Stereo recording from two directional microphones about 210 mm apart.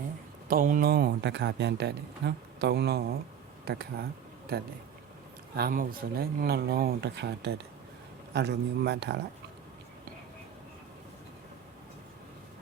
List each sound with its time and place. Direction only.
0.4 s a man's voice: 40° right (ahead or behind)